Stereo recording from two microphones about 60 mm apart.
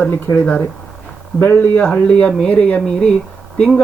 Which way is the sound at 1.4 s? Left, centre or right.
Left.